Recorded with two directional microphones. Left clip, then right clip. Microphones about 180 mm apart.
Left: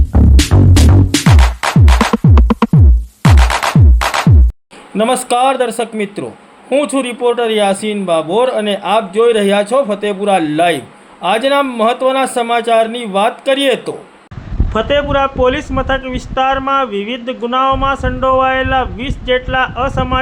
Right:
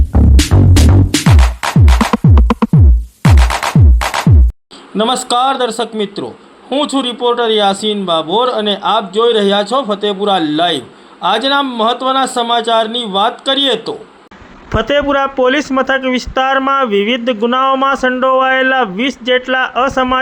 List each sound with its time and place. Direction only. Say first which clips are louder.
0.1 s music: even; centre (ahead or behind)
5.2 s a man's voice: left 1 dB; 15° left (ahead or behind)
14.7 s a man's voice: right 1 dB; 30° right (ahead or behind)